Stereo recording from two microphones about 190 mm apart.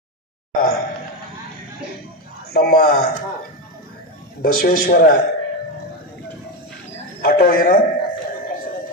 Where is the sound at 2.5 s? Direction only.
55° left (ahead or behind).